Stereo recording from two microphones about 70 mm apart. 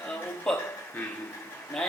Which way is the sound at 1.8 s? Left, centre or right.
Centre.